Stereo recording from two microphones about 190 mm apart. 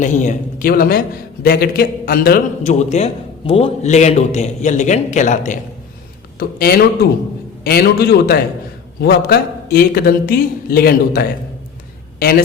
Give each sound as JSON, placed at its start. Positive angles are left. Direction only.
{"t": 0.0, "sound": "a man's voice", "side_deg": 40}
{"t": 2.6, "sound": "a man's voice", "side_deg": 35}
{"t": 6.6, "sound": "a man's voice", "side_deg": 55}